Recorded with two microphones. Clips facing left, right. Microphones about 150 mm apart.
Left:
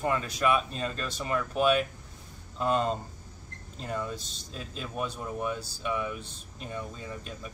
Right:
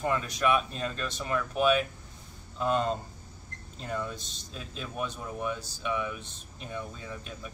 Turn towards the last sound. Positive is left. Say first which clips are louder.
# left 1 dB
turn(degrees=0)  # may be behind; listen again after turning